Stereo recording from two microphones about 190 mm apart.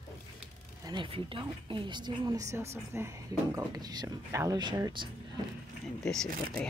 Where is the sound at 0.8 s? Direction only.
25° right (ahead or behind).